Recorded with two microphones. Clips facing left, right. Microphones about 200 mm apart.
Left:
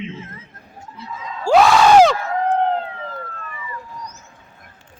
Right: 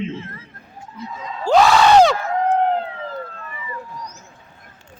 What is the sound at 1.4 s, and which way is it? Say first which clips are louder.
Crowd: left 1 dB; centre (ahead or behind).